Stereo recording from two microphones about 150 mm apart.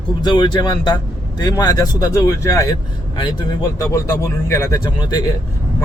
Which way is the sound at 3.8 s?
20° left (ahead or behind).